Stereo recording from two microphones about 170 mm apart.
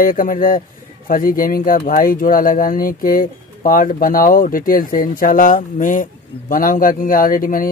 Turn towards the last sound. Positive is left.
turn(degrees=55)  # may be behind; listen again after turning